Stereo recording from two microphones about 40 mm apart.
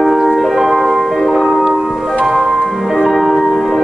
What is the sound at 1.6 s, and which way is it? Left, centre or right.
Music, centre.